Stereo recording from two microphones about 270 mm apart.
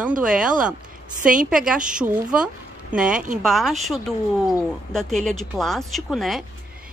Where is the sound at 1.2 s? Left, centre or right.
Right.